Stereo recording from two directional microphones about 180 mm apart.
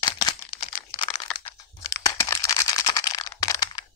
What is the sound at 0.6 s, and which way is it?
Crumpling, 30° left (ahead or behind).